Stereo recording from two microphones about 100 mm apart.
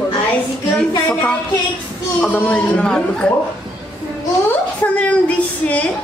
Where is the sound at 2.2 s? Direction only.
15° left (ahead or behind).